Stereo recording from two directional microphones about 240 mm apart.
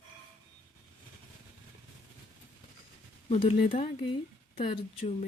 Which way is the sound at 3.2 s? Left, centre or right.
Left.